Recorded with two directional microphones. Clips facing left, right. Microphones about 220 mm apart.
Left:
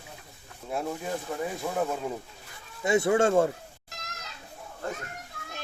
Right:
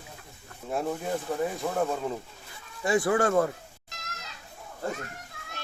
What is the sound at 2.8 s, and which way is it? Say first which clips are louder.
Speech: left 1 dB; 25° left (ahead or behind).